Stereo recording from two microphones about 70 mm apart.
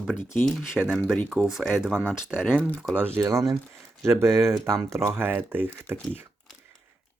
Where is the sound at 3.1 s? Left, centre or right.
Right.